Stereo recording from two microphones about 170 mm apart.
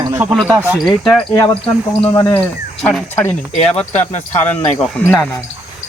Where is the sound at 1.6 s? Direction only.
35° left (ahead or behind).